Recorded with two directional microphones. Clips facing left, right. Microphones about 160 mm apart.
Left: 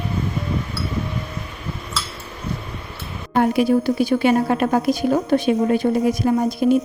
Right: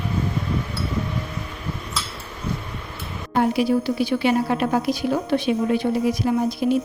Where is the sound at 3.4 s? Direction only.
50° left (ahead or behind).